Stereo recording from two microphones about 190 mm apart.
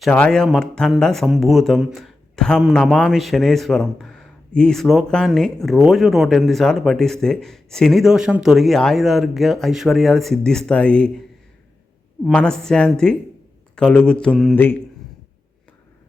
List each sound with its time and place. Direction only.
0.0 s speech: 5° left (ahead or behind)
12.2 s speech: 5° left (ahead or behind)